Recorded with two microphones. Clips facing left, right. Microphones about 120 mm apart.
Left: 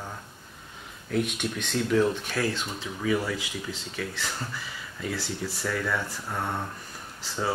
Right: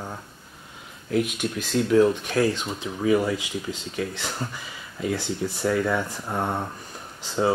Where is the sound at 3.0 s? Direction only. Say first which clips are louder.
Right 6 dB; 20° right (ahead or behind).